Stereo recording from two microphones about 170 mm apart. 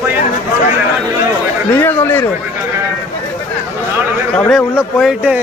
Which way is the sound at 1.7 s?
10° left (ahead or behind).